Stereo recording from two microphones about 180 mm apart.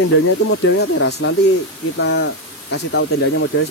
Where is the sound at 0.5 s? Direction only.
80° left.